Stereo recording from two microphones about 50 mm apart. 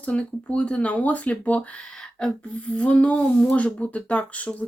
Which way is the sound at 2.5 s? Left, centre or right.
Left.